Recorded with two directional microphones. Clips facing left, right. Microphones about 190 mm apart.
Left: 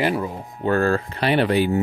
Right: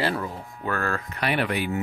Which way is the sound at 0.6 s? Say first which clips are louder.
Left 9 dB; 30° left (ahead or behind).